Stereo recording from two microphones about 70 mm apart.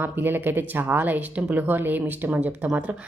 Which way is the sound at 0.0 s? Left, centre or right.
Right.